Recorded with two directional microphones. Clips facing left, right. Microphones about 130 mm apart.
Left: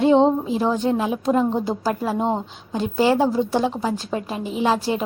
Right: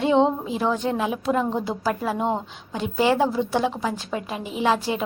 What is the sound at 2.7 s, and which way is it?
A woman's voice, 35° left (ahead or behind).